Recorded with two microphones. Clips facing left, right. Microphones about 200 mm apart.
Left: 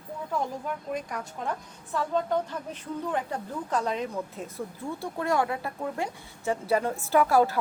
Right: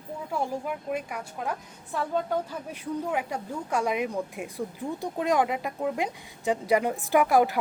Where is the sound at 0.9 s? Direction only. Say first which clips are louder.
Right 1 dB; 10° right (ahead or behind).